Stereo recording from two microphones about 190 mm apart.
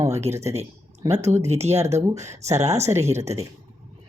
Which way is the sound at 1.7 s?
15° right (ahead or behind).